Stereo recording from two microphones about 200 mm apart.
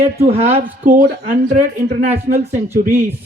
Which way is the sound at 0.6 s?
45° right (ahead or behind).